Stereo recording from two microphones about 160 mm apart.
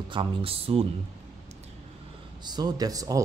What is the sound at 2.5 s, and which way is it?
Speech, 25° right (ahead or behind).